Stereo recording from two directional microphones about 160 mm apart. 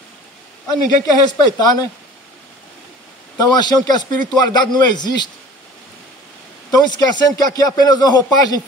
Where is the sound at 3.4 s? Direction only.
25° left (ahead or behind).